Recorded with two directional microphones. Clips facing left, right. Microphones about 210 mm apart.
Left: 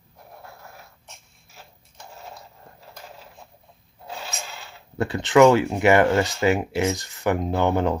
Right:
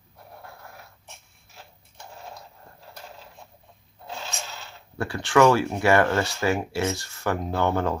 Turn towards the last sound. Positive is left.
turn(degrees=20)  # may be behind; listen again after turning